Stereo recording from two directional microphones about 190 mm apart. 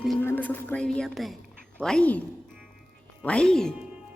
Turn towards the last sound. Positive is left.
turn(degrees=5)  # may be behind; listen again after turning